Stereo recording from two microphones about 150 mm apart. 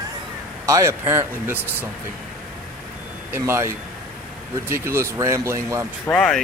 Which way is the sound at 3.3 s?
15° right (ahead or behind).